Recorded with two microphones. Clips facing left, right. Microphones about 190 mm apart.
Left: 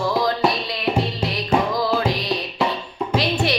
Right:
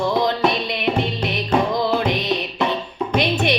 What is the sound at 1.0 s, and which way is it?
Music, 20° right (ahead or behind).